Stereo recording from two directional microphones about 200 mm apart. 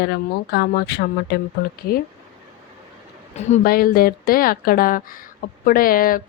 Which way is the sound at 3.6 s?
50° left (ahead or behind).